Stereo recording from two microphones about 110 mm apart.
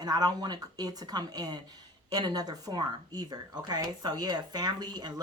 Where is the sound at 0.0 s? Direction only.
40° right (ahead or behind).